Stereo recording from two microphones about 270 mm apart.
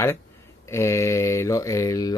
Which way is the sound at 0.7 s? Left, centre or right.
Centre.